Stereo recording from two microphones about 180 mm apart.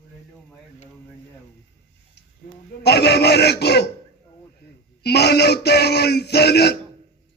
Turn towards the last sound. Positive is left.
turn(degrees=65)  # may be behind; listen again after turning